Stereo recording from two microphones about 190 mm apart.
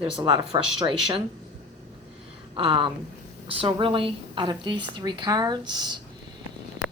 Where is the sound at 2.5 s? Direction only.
25° right (ahead or behind).